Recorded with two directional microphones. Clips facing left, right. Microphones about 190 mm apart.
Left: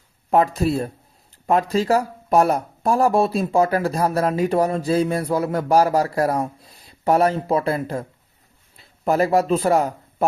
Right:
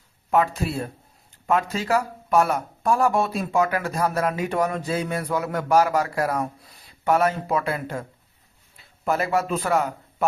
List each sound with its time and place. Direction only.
0.3 s speech: 35° left (ahead or behind)
9.0 s speech: 35° left (ahead or behind)